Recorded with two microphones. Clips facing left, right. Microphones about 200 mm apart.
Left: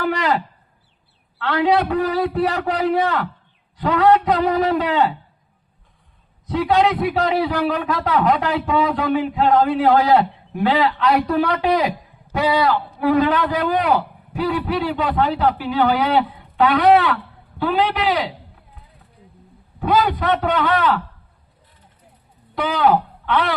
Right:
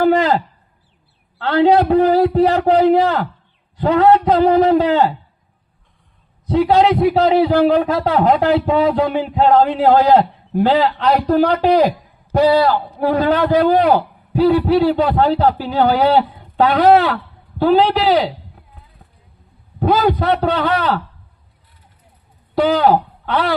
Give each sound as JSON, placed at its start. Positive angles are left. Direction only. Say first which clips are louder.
{"t": 0.0, "sound": "a sound", "louder": "right 7 dB", "side_deg": -30}
{"t": 1.4, "sound": "a man's voice", "louder": "right 5 dB", "side_deg": -30}
{"t": 6.8, "sound": "a man's voice", "louder": "right 6 dB", "side_deg": -30}
{"t": 19.8, "sound": "a man's voice", "louder": "right 3 dB", "side_deg": -40}
{"t": 22.5, "sound": "a man's voice", "louder": "right 4 dB", "side_deg": -40}